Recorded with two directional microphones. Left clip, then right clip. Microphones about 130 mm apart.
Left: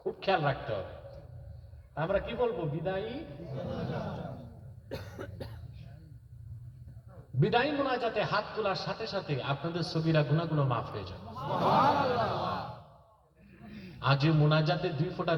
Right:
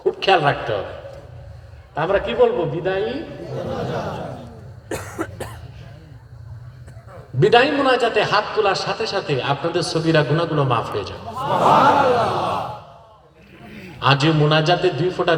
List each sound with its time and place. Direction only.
0.0 s a man's voice: 40° right (ahead or behind)
4.9 s cough: 5° right (ahead or behind)
7.3 s a man's voice: 40° right (ahead or behind)
11.3 s speech: centre (ahead or behind)
13.7 s a sound: 5° right (ahead or behind)
14.0 s a man's voice: 40° right (ahead or behind)